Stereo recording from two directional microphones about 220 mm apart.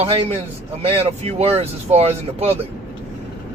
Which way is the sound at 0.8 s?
25° right (ahead or behind).